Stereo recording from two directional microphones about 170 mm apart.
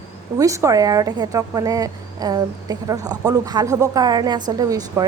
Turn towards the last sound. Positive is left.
turn(degrees=-20)  # may be behind; listen again after turning